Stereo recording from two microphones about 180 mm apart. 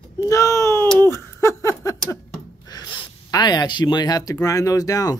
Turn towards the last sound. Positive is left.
turn(degrees=20)  # may be behind; listen again after turning